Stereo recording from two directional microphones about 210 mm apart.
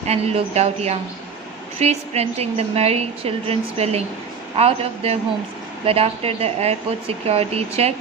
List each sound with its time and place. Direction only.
0.0 s a woman's voice: 30° right (ahead or behind)